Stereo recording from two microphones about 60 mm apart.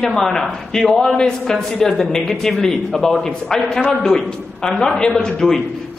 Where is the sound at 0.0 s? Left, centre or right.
Centre.